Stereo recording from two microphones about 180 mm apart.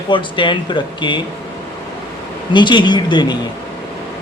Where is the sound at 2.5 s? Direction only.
25° left (ahead or behind).